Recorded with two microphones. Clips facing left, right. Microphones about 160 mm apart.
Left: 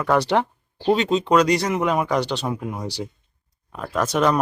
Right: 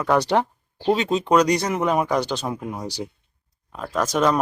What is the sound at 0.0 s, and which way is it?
Speech, 10° right (ahead or behind).